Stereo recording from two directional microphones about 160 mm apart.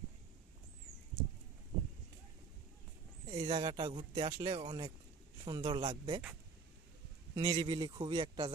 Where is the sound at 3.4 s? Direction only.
30° right (ahead or behind).